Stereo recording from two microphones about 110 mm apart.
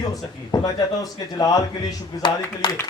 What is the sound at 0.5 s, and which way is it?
A man's voice, 35° left (ahead or behind).